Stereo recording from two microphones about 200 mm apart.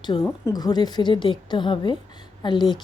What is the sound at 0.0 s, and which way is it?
Speech, 20° left (ahead or behind).